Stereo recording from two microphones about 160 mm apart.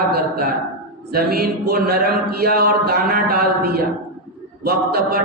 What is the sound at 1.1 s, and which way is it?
Speech, 70° right (ahead or behind).